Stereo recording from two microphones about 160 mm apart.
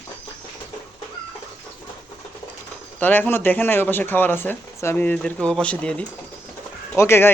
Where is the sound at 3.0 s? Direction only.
10° left (ahead or behind).